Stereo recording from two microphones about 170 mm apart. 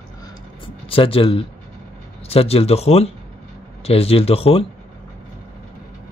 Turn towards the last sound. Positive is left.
turn(degrees=35)  # may be behind; listen again after turning